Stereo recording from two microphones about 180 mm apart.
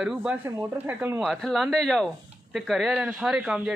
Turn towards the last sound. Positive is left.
turn(degrees=-5)  # may be behind; listen again after turning